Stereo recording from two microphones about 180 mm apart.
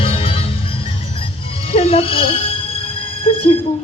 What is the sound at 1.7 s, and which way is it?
Music, 35° left (ahead or behind).